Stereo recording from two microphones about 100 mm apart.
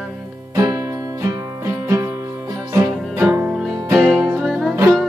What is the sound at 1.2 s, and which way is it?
Music, 35° right (ahead or behind).